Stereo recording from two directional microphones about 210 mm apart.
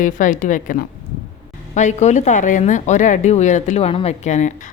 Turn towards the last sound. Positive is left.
turn(degrees=35)  # may be behind; listen again after turning